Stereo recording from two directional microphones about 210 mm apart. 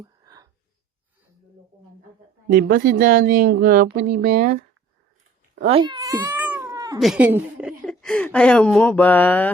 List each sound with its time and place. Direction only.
0.0 s a sound: 20° right (ahead or behind)
2.6 s speech: 45° right (ahead or behind)
5.5 s speech: 25° right (ahead or behind)
7.0 s a woman's voice: 5° right (ahead or behind)